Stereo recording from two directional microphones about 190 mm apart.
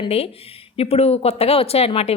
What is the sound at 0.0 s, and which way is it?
Speech, 30° left (ahead or behind).